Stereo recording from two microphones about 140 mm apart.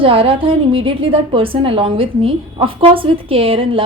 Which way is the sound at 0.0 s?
40° right (ahead or behind).